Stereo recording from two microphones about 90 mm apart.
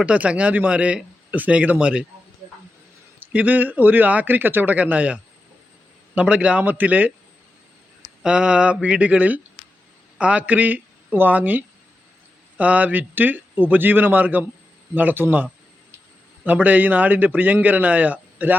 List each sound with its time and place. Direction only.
0.0 s speech: 15° right (ahead or behind)
3.2 s a man's voice: 20° right (ahead or behind)
8.2 s a man's voice: 10° right (ahead or behind)